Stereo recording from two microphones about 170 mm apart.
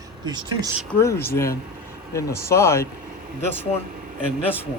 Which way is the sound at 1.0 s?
15° left (ahead or behind).